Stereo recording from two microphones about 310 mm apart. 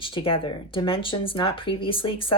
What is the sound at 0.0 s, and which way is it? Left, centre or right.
Speech, centre.